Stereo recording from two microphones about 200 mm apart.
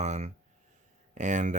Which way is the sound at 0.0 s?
35° right (ahead or behind).